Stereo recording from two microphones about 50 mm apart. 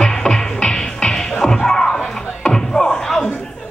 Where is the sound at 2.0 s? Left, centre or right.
Centre.